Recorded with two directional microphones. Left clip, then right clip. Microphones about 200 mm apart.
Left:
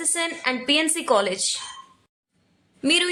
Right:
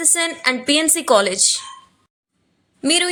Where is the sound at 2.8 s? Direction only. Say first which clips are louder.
Right 3 dB; 15° right (ahead or behind).